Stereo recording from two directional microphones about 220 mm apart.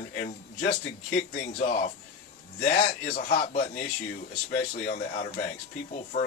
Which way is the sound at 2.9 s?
45° left (ahead or behind).